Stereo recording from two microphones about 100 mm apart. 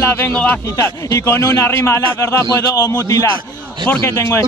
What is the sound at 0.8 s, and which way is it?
A man's voice, 30° left (ahead or behind).